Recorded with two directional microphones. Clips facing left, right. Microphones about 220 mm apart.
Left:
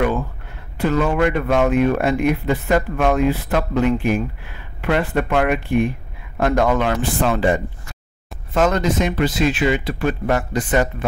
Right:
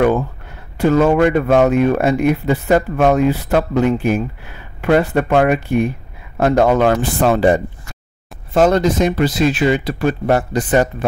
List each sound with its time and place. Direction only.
0.7 s speech: 45° right (ahead or behind)